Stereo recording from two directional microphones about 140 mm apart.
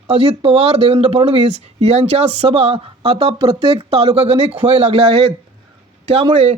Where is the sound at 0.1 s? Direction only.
45° right (ahead or behind).